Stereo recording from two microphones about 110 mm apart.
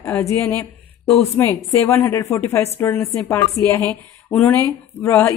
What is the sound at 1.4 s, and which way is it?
A woman's voice, 30° left (ahead or behind).